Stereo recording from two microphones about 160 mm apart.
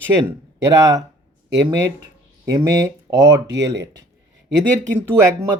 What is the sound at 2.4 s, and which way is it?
Speech, 20° right (ahead or behind).